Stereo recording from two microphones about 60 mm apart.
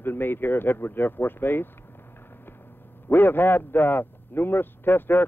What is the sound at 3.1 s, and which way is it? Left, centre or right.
A man's voice, left.